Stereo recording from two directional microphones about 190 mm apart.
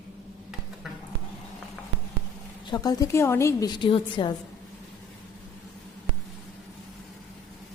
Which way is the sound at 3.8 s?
25° left (ahead or behind).